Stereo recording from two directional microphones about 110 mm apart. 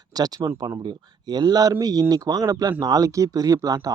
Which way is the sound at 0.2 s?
40° right (ahead or behind).